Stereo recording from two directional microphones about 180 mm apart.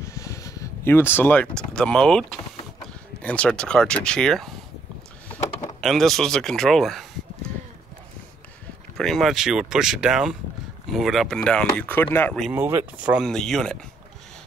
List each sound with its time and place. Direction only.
0.0 s speech: 15° left (ahead or behind)
5.8 s speech: centre (ahead or behind)
8.9 s speech: centre (ahead or behind)
12.5 s speech: 10° right (ahead or behind)